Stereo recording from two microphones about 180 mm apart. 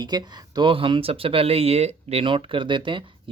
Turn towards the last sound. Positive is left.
turn(degrees=-25)  # may be behind; listen again after turning